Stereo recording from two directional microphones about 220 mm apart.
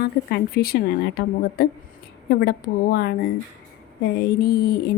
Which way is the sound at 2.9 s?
45° left (ahead or behind).